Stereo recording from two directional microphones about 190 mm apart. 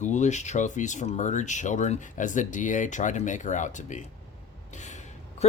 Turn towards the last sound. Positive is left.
turn(degrees=40)  # may be behind; listen again after turning